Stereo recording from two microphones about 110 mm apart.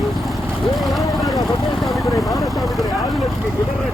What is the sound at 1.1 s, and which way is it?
Vehicle, centre (ahead or behind).